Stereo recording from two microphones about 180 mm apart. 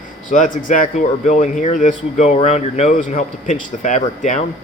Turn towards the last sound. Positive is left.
turn(degrees=45)  # may be behind; listen again after turning